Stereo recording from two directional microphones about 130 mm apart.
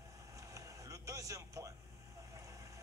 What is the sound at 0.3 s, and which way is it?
Vehicle, 25° right (ahead or behind).